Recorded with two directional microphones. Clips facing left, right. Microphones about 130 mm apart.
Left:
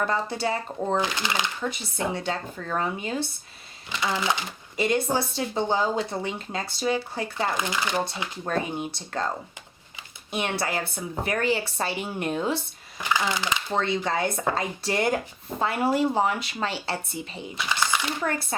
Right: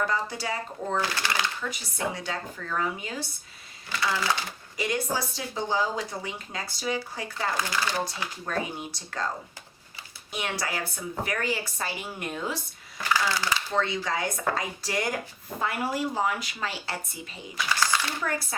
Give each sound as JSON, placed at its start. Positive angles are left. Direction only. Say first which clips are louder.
{"t": 0.1, "sound": "speech", "louder": "left 4 dB", "side_deg": 25}
{"t": 10.3, "sound": "speech", "louder": "left 4 dB", "side_deg": 25}